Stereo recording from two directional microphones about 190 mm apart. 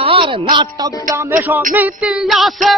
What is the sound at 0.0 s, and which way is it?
Speech, 30° right (ahead or behind).